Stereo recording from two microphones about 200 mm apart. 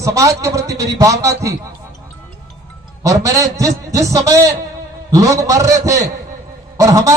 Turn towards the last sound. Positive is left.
turn(degrees=-15)  # may be behind; listen again after turning